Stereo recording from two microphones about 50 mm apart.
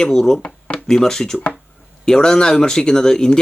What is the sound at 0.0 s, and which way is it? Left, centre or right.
Speech, centre.